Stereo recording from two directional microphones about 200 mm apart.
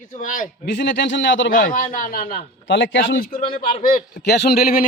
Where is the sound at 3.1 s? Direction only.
45° left (ahead or behind).